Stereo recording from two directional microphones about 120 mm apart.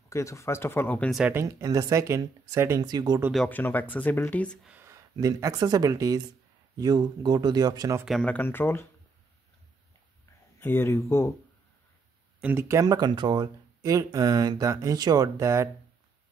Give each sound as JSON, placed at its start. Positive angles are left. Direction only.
{"t": 0.1, "sound": "speech", "side_deg": 25}
{"t": 1.3, "sound": "speech", "side_deg": -25}
{"t": 2.8, "sound": "speech", "side_deg": -35}
{"t": 3.4, "sound": "speech", "side_deg": 15}
{"t": 4.8, "sound": "speech", "side_deg": -25}
{"t": 8.0, "sound": "speech", "side_deg": 0}
{"t": 8.3, "sound": "speech", "side_deg": 15}
{"t": 10.6, "sound": "speech", "side_deg": 20}
{"t": 12.5, "sound": "speech", "side_deg": -25}